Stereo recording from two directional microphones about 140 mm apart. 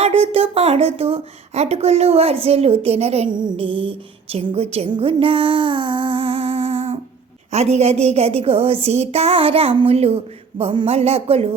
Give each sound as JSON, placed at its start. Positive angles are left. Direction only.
{"t": 0.0, "sound": "a woman's voice", "side_deg": -45}
{"t": 3.2, "sound": "a sound", "side_deg": -35}
{"t": 7.5, "sound": "a woman's voice", "side_deg": -50}